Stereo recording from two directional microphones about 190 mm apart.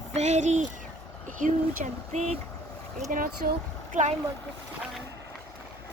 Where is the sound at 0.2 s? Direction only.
40° right (ahead or behind).